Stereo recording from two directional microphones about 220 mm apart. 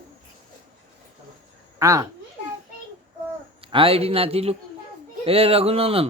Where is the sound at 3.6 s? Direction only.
25° right (ahead or behind).